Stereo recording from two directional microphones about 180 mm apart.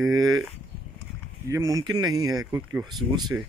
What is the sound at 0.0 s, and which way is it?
Speech, 20° right (ahead or behind).